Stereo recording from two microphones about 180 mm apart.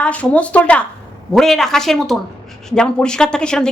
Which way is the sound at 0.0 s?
5° left (ahead or behind).